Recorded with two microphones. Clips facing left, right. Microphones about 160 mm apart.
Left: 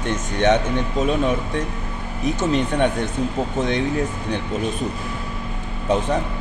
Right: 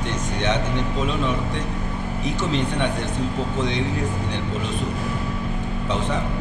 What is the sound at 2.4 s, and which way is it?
Speech, 45° left (ahead or behind).